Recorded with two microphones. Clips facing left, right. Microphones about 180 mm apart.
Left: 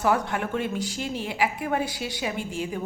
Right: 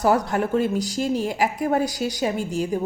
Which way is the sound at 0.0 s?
40° right (ahead or behind).